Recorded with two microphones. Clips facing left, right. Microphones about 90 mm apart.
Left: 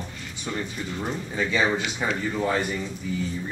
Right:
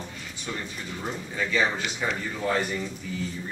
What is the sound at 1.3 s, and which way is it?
Speech, 20° left (ahead or behind).